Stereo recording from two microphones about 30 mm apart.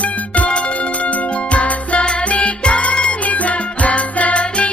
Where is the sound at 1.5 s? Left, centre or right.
Left.